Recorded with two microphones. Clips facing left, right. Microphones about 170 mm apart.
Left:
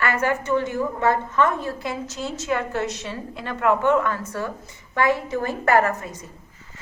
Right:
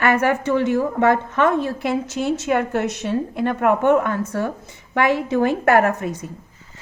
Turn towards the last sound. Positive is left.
turn(degrees=-65)  # may be behind; listen again after turning